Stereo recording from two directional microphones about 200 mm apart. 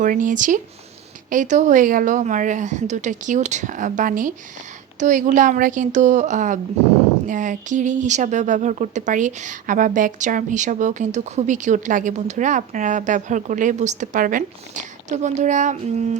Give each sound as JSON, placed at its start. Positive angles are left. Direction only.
{"t": 0.0, "sound": "speech", "side_deg": -40}